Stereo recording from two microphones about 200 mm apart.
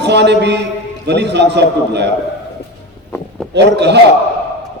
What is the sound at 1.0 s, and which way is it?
A man's voice, 60° right (ahead or behind).